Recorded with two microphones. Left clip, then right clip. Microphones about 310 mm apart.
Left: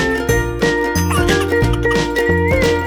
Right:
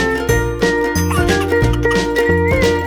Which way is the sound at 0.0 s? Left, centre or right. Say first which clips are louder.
Even; centre.